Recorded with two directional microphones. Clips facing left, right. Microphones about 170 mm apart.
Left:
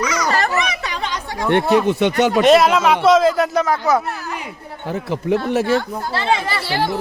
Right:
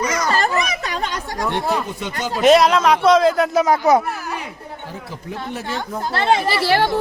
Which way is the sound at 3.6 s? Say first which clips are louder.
Right 2 dB; 20° right (ahead or behind).